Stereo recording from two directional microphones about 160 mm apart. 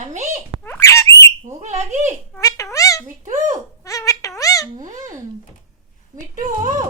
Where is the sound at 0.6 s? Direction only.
15° left (ahead or behind).